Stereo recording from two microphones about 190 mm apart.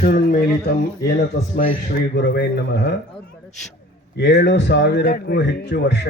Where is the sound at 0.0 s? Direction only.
50° left (ahead or behind).